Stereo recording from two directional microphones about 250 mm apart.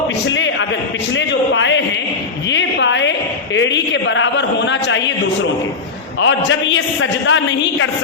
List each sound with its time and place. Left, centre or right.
0.3 s a man's voice: left
1.1 s a sound: left
6.1 s a man's voice: left